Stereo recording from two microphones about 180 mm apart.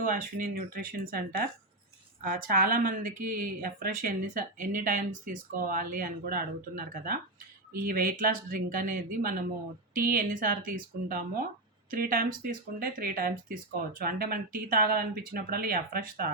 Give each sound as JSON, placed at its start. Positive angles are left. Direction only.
{"t": 0.1, "sound": "speech", "side_deg": -55}